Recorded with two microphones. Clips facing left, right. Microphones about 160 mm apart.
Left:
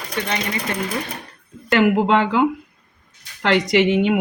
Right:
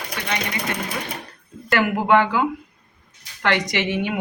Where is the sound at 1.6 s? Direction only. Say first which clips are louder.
Left 3 dB; 25° left (ahead or behind).